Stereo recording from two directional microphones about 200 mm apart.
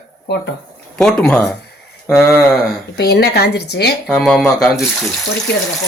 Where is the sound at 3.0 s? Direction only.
55° left (ahead or behind).